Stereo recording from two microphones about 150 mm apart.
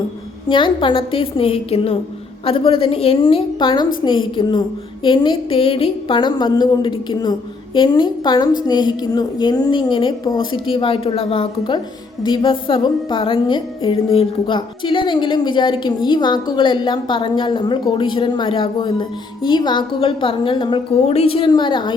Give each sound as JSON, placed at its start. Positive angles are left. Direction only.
{"t": 0.4, "sound": "music", "side_deg": 35}